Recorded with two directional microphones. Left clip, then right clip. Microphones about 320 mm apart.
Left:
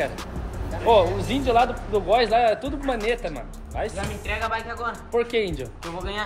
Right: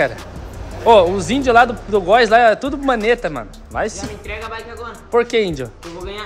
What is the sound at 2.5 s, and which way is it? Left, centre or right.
Speech, right.